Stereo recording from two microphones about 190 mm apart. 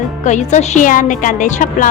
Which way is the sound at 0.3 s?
40° left (ahead or behind).